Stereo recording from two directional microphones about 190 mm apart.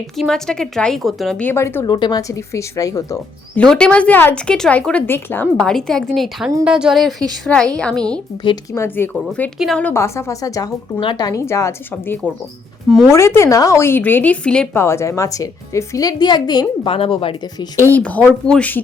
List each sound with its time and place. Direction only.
0.2 s speech: 5° left (ahead or behind)
3.6 s speech: 5° left (ahead or behind); by 17.7 s 30° left (ahead or behind)
17.8 s speech: 10° left (ahead or behind)